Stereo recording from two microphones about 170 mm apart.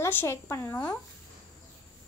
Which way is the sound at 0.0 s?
15° left (ahead or behind).